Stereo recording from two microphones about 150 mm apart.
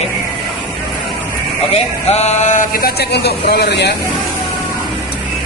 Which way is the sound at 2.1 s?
45° left (ahead or behind).